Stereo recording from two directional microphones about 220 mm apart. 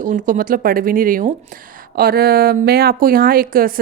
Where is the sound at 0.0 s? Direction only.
35° right (ahead or behind).